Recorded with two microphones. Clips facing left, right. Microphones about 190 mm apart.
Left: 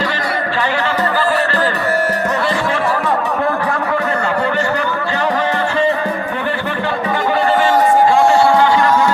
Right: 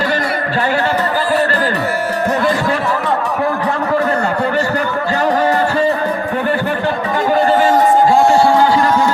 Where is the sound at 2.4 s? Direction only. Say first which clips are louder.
Right 2 dB; 45° right (ahead or behind).